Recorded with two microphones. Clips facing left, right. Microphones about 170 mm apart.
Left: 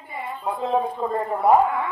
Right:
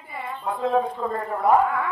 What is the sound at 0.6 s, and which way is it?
Speech, 20° left (ahead or behind).